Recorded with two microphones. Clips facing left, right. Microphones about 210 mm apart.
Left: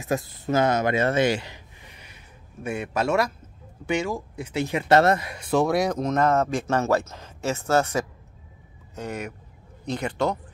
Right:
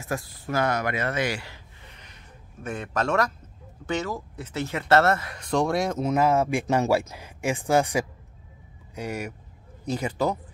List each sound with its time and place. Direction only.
0.0 s speech: 20° left (ahead or behind); by 10.4 s 10° right (ahead or behind)